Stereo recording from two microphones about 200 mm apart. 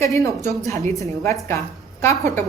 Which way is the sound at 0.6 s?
15° left (ahead or behind).